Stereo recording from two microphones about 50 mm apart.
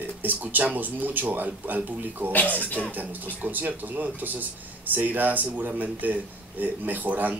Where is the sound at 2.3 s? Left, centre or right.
Left.